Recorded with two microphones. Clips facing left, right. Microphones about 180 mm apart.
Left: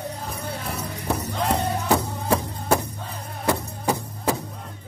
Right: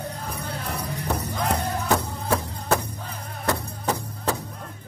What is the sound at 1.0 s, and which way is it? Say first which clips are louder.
Music: left 2 dB; 5° left (ahead or behind).